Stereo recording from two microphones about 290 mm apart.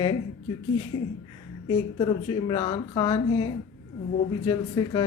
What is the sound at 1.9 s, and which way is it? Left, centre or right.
Speech, centre.